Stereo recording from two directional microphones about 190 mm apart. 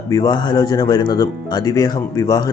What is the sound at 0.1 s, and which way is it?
A man's voice, 20° left (ahead or behind).